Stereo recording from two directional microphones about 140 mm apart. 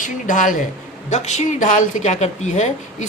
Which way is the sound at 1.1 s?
55° left (ahead or behind).